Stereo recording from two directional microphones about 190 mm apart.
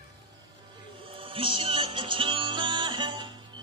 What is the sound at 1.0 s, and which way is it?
Music, 30° right (ahead or behind).